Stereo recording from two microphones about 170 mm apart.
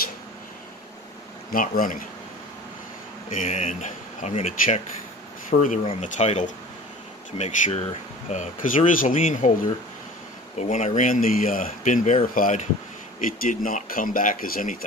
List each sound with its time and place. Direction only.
1.5 s speech: 55° left (ahead or behind)
3.3 s speech: 45° left (ahead or behind)
5.5 s speech: 45° left (ahead or behind)
8.3 s speech: 50° left (ahead or behind)
10.6 s speech: 45° left (ahead or behind)